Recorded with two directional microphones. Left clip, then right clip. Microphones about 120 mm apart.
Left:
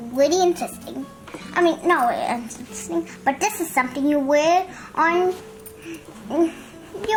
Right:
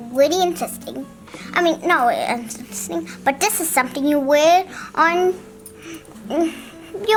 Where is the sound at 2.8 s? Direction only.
40° right (ahead or behind).